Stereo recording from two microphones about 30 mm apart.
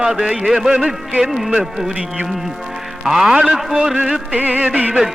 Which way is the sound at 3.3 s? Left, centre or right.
Right.